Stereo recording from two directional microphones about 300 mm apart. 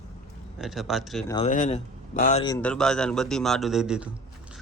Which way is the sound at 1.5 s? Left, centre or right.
Left.